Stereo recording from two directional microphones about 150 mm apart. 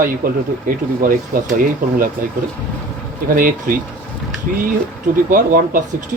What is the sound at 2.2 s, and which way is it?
Speech, 70° right (ahead or behind).